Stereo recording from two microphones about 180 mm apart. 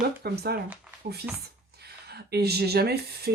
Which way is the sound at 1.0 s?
50° right (ahead or behind).